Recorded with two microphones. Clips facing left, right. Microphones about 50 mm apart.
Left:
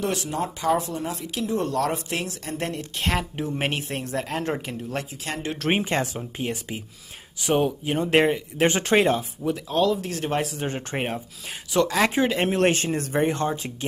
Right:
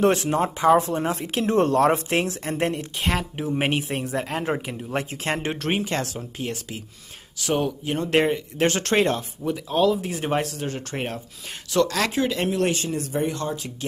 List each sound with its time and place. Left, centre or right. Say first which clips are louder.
0.0 s speech: right 6 dB; right
3.0 s speech: left 1 dB; centre
5.1 s speech: right 4 dB; right
5.7 s speech: left 3 dB; left; by 10.4 s centre
10.6 s speech: left 1 dB; left
12.4 s speech: left 2 dB; left